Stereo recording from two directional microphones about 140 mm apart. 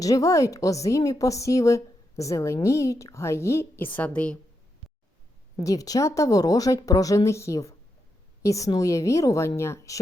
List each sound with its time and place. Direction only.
0.0 s a woman's voice: 25° left (ahead or behind)
5.6 s a woman's voice: 25° left (ahead or behind)